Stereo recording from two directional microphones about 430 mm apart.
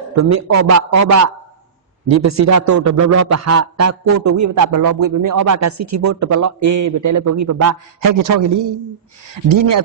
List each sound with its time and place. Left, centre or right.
0.1 s a man's voice: right